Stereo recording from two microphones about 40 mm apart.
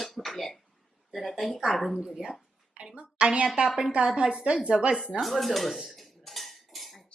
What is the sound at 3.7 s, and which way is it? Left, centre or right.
Speech, centre.